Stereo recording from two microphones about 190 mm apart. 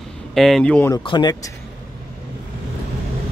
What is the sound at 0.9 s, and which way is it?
Speech, 25° left (ahead or behind).